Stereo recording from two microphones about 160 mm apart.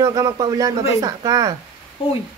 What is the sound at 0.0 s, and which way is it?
Speech, 25° right (ahead or behind).